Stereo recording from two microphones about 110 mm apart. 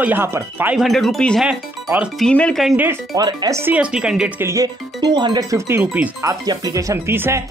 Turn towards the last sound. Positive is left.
turn(degrees=-25)  # may be behind; listen again after turning